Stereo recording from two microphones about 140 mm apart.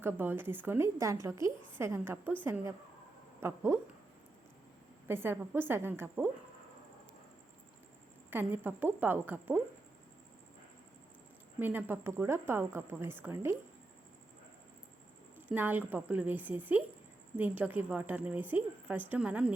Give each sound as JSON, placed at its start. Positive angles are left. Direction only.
{"t": 0.0, "sound": "a woman's voice", "side_deg": -15}
{"t": 5.0, "sound": "a woman's voice", "side_deg": -15}
{"t": 8.3, "sound": "a woman's voice", "side_deg": -15}
{"t": 11.6, "sound": "a woman's voice", "side_deg": -15}
{"t": 15.4, "sound": "a woman's voice", "side_deg": -15}